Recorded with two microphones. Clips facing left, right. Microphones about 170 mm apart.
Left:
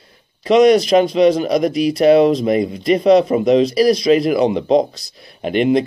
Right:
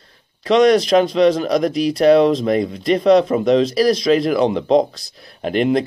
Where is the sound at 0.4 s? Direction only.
Centre (ahead or behind).